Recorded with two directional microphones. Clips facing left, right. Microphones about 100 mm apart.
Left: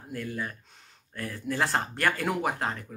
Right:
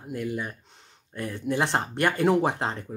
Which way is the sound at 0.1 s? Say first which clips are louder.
Right 4 dB; 20° right (ahead or behind).